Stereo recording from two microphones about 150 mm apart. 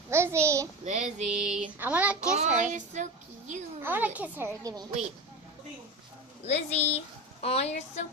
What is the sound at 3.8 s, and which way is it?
A woman's voice, 10° right (ahead or behind).